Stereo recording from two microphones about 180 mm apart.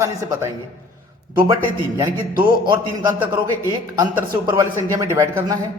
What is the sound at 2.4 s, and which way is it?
A man's voice, 25° right (ahead or behind).